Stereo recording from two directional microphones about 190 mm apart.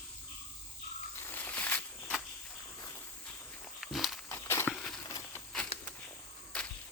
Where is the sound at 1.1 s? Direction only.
10° left (ahead or behind).